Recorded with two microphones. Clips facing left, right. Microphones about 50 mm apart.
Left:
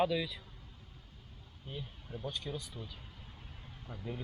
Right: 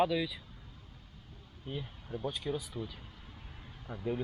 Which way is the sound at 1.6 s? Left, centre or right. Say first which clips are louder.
Right 4 dB; centre.